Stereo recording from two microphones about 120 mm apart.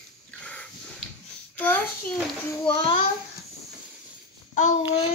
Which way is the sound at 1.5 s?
15° left (ahead or behind).